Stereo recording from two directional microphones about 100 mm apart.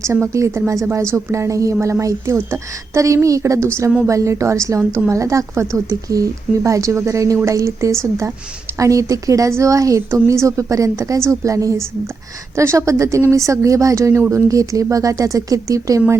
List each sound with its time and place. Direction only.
0.0 s speech: 30° right (ahead or behind)